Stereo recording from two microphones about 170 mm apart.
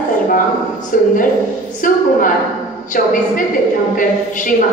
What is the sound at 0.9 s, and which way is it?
A woman's voice, 50° left (ahead or behind).